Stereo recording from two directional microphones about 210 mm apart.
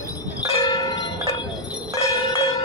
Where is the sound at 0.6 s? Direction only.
20° left (ahead or behind).